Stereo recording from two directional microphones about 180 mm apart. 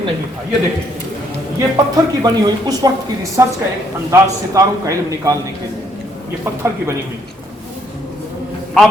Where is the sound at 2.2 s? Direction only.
20° right (ahead or behind).